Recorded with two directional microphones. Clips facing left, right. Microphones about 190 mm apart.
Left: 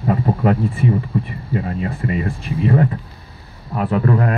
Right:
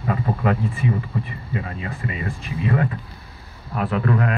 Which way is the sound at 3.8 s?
30° left (ahead or behind).